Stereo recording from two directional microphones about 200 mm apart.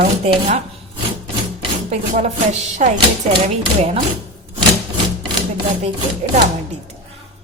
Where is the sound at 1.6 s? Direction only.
35° right (ahead or behind).